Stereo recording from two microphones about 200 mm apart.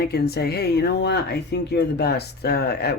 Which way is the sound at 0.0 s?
55° left (ahead or behind).